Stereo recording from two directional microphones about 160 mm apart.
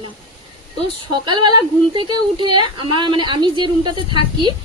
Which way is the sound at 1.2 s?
30° right (ahead or behind).